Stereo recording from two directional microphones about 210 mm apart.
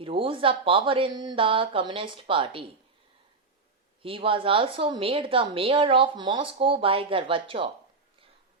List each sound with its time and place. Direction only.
0.0 s a woman's voice: 25° right (ahead or behind)
4.0 s a woman's voice: 25° right (ahead or behind)